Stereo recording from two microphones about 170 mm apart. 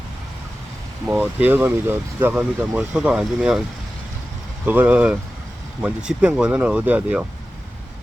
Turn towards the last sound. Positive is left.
turn(degrees=-10)  # may be behind; listen again after turning